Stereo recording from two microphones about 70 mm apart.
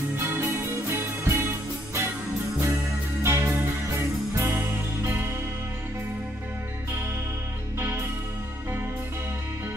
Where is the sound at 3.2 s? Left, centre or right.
Right.